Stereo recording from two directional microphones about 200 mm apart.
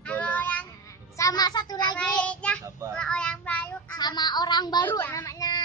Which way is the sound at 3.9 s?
20° left (ahead or behind).